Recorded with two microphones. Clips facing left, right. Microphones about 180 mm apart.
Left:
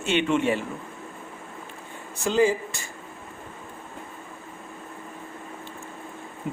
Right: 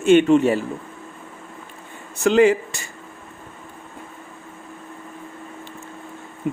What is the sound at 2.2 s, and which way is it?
Speech, 70° right (ahead or behind).